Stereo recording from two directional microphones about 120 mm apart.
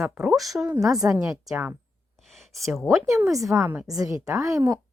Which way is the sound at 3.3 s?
25° right (ahead or behind).